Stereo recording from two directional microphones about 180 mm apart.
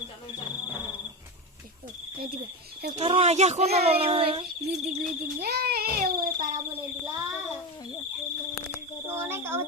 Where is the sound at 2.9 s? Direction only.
35° right (ahead or behind).